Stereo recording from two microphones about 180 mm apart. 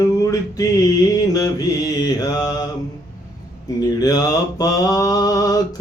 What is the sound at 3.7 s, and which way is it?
Mantra, 20° left (ahead or behind).